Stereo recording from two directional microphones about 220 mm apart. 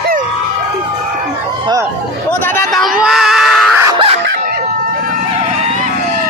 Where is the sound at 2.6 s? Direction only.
Centre (ahead or behind).